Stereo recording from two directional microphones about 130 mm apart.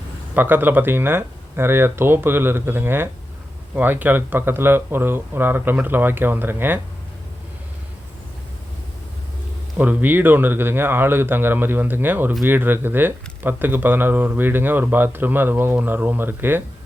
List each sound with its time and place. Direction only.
0.3 s speech: 15° right (ahead or behind)
9.7 s speech: 15° right (ahead or behind)